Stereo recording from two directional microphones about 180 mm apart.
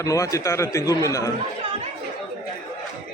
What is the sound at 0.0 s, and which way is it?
A man's voice, 20° left (ahead or behind).